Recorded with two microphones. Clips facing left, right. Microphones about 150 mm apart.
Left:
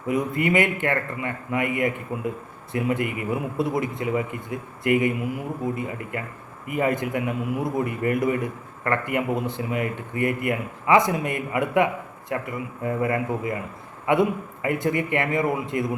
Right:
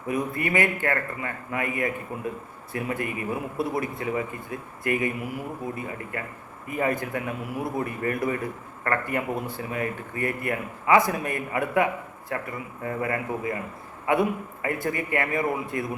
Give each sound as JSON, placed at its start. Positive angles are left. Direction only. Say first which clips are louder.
{"t": 0.1, "sound": "a man's voice", "louder": "left 4 dB", "side_deg": 20}